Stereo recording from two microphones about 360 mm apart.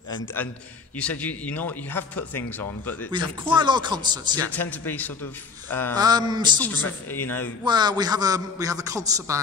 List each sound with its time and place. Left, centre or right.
0.1 s a man's voice: centre
3.1 s a man's voice: centre
4.5 s speech: centre
5.9 s a man's voice: centre
6.6 s speech: centre
7.6 s a man's voice: centre